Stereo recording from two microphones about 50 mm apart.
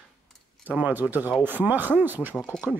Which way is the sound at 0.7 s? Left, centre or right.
Right.